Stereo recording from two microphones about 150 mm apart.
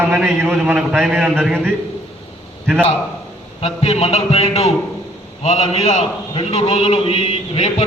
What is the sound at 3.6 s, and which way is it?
A man's voice, 40° left (ahead or behind).